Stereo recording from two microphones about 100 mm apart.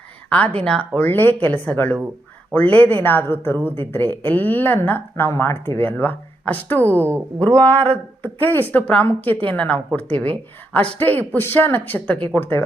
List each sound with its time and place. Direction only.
0.3 s speech: 10° left (ahead or behind)